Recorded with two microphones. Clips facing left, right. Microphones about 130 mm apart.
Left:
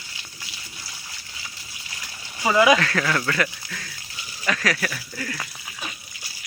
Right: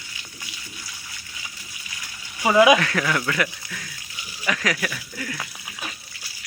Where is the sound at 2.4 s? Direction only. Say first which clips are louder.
Right 2 dB; 15° right (ahead or behind).